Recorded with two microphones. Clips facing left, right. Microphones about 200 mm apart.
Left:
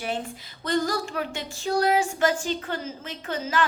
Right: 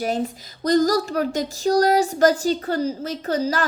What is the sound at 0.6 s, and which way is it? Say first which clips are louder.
Speech: right 8 dB; 40° right (ahead or behind).